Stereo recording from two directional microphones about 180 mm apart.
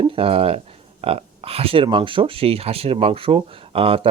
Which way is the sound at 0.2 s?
30° right (ahead or behind).